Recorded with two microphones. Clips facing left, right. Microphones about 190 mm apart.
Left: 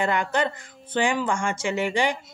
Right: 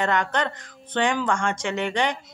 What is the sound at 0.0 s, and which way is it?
A woman's voice, 10° left (ahead or behind).